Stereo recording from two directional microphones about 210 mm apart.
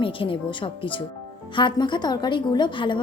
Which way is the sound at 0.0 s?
25° left (ahead or behind).